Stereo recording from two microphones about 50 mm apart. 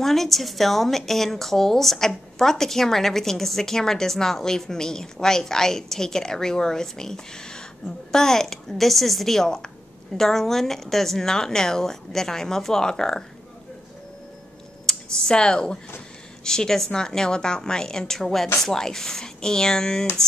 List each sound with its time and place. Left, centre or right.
0.0 s a woman's voice: centre
14.9 s a woman's voice: centre